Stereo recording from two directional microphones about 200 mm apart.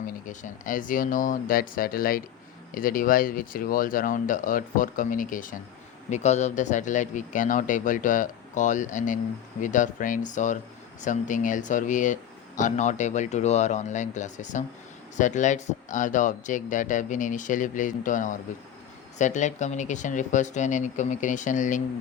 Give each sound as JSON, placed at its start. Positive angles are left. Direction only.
{"t": 0.0, "sound": "speech", "side_deg": 40}